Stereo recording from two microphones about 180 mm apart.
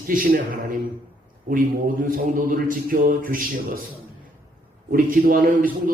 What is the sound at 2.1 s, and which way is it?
A man's voice, 50° right (ahead or behind).